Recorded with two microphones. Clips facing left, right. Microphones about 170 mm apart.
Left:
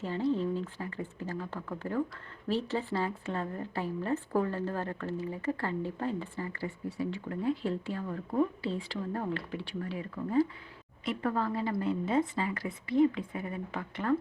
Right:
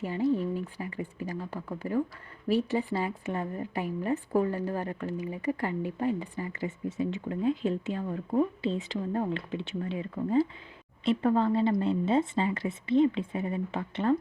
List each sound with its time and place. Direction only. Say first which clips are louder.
0.0 s a woman's voice: right 2 dB; 15° right (ahead or behind)